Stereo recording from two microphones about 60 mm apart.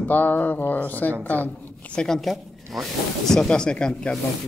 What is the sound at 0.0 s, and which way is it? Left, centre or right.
Speech, left.